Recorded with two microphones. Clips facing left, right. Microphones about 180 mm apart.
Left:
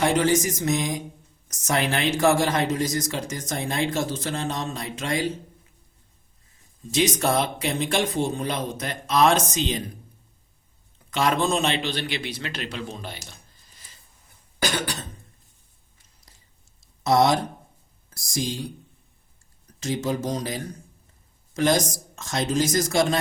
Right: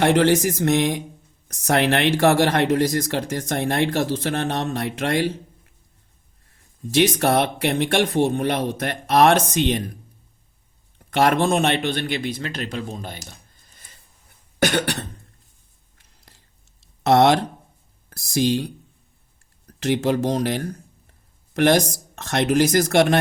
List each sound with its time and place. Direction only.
0.0 s speech: 65° right (ahead or behind)
6.5 s speech: 60° right (ahead or behind)
10.9 s a man's voice: 60° right (ahead or behind)
14.6 s speech: 60° right (ahead or behind)
17.0 s speech: 65° right (ahead or behind)
19.6 s speech: 65° right (ahead or behind)